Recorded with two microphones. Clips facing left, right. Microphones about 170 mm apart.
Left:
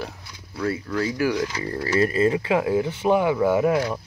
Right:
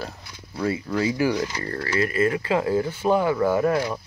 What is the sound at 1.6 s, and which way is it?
Speech, 15° left (ahead or behind).